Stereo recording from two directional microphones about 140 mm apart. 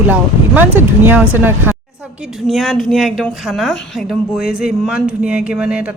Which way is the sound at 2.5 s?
Centre (ahead or behind).